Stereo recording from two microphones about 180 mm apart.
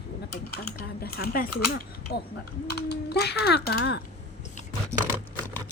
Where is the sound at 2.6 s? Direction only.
65° left (ahead or behind).